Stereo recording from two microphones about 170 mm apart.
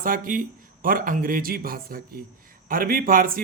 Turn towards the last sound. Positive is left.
turn(degrees=-55)  # may be behind; listen again after turning